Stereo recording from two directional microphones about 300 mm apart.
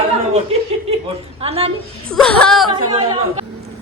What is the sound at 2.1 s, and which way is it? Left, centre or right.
Speech, centre.